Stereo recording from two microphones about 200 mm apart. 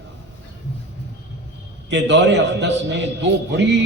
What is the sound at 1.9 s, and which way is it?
A man's voice, 60° right (ahead or behind).